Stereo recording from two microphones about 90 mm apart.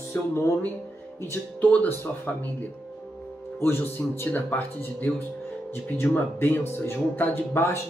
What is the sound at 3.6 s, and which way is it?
Speech, 25° left (ahead or behind).